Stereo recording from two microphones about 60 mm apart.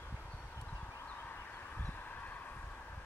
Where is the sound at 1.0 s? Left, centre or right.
Left.